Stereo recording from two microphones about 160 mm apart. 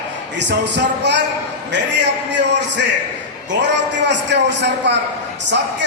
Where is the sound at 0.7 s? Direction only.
90° right.